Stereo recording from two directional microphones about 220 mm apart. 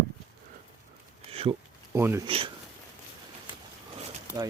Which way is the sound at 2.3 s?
25° right (ahead or behind).